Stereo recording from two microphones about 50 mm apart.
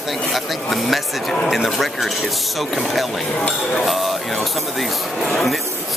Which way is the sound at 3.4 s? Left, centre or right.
Left.